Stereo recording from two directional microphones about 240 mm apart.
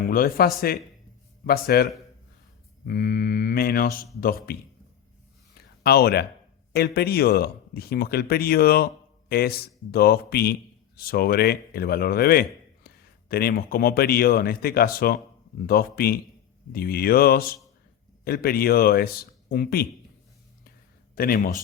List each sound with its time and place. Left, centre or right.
0.1 s a man's voice: left
5.8 s a man's voice: left
21.2 s a man's voice: left